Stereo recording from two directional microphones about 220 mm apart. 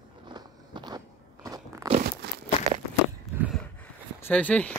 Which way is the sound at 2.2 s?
50° right (ahead or behind).